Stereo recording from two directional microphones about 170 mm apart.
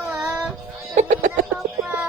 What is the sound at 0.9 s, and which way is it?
Music, 45° right (ahead or behind).